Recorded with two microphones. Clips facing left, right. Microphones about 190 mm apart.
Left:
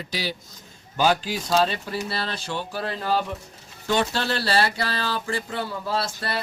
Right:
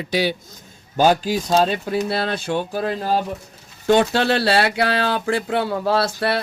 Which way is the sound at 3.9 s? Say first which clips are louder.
Right 8 dB; 55° right (ahead or behind).